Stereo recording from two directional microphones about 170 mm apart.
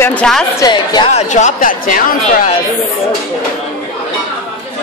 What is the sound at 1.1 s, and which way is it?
Speech, 45° left (ahead or behind).